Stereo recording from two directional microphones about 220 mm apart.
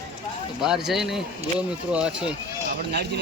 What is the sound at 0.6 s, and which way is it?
Speech, centre (ahead or behind).